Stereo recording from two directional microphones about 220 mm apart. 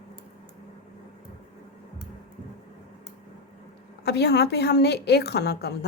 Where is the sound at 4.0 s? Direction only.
50° left (ahead or behind).